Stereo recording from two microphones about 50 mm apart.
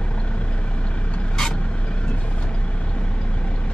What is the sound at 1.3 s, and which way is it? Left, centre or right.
Vehicle, centre.